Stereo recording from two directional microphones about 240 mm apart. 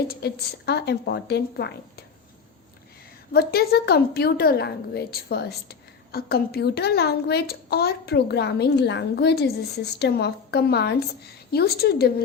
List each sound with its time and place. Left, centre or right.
0.1 s a woman's voice: left
3.3 s a woman's voice: left